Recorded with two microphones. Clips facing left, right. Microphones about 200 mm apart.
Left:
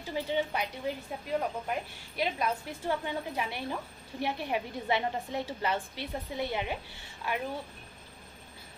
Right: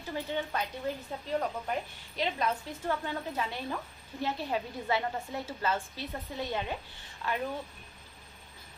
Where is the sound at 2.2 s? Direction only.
10° left (ahead or behind).